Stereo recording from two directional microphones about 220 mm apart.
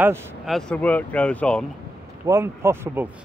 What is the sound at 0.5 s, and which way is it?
Speech, 5° left (ahead or behind).